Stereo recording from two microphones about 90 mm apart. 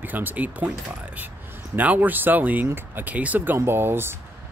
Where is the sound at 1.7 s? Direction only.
20° right (ahead or behind).